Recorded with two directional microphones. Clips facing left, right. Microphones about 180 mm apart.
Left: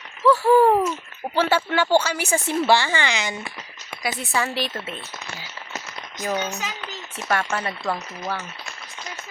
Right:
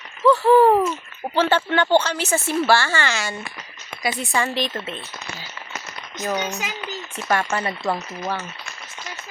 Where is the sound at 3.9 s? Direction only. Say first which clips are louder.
Right 2 dB; 5° left (ahead or behind).